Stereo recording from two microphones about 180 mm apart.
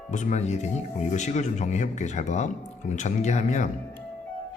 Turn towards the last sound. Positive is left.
turn(degrees=40)  # may be behind; listen again after turning